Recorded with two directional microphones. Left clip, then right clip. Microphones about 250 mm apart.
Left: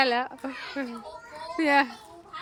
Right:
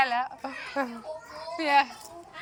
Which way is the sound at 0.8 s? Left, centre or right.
Centre.